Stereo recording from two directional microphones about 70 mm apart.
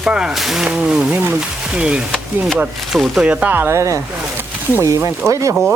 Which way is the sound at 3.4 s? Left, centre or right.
Right.